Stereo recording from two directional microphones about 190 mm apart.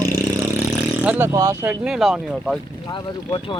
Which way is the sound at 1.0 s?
10° right (ahead or behind).